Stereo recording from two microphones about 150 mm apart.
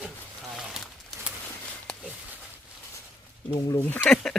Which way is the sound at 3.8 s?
10° left (ahead or behind).